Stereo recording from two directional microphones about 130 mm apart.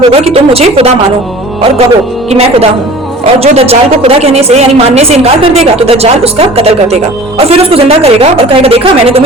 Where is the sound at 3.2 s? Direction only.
50° right (ahead or behind).